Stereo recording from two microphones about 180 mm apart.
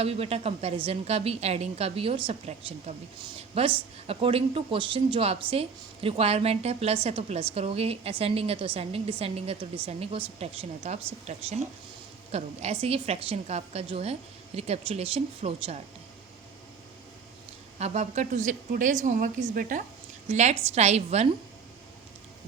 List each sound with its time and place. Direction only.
0.0 s speech: 35° right (ahead or behind)
3.3 s a sound: 35° right (ahead or behind)
4.0 s speech: 30° right (ahead or behind)
17.7 s a woman's voice: 35° right (ahead or behind)